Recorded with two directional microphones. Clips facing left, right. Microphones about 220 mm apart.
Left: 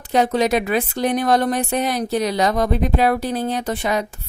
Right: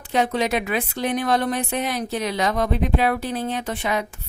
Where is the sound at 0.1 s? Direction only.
40° left (ahead or behind).